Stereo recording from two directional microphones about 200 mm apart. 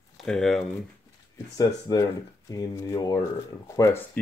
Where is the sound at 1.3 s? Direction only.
20° left (ahead or behind).